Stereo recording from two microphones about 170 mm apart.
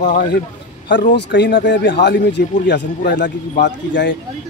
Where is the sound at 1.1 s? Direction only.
85° left.